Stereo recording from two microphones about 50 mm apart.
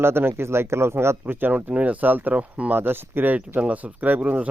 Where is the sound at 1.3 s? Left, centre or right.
Right.